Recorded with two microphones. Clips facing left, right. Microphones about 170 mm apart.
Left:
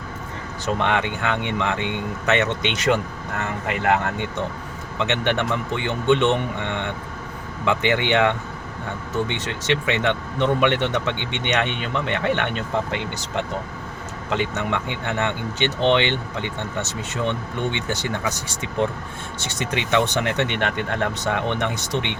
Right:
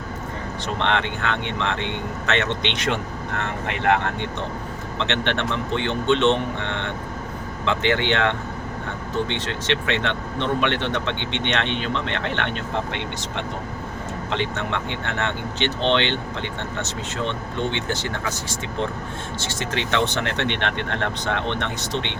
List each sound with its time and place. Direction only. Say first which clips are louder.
0.6 s speech: left 2 dB; 10° left (ahead or behind)
19.4 s speech: left 2 dB; 15° left (ahead or behind)